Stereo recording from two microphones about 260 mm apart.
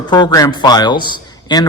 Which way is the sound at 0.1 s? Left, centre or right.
Centre.